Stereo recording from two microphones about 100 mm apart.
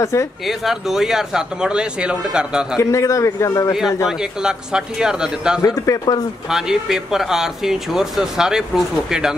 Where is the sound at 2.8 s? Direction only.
30° left (ahead or behind).